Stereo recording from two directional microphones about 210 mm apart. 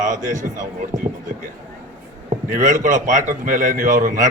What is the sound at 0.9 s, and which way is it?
Speech, 15° right (ahead or behind).